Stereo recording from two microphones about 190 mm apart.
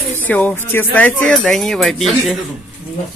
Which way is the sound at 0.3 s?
10° left (ahead or behind).